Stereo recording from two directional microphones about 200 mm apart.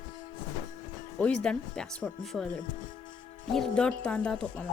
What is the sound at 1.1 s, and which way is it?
Speech, 5° left (ahead or behind).